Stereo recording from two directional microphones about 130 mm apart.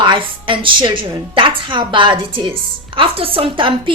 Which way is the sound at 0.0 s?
40° right (ahead or behind).